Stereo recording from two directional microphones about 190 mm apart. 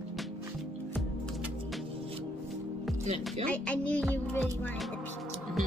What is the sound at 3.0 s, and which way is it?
Speech, 35° right (ahead or behind).